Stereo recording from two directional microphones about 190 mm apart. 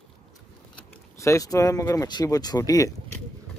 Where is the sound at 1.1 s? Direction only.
15° left (ahead or behind).